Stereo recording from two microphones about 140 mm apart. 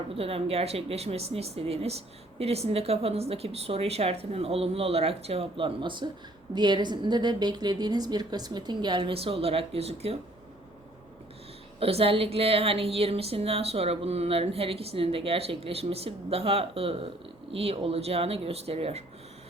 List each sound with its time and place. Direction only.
0.2 s a woman's voice: 45° right (ahead or behind)
11.8 s speech: 45° right (ahead or behind)